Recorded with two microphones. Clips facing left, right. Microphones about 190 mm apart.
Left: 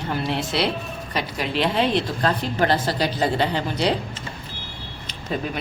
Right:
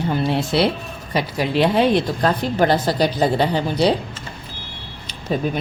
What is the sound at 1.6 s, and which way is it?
A woman's voice, 50° right (ahead or behind).